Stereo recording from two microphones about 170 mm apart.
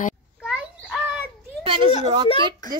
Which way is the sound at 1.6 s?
30° right (ahead or behind).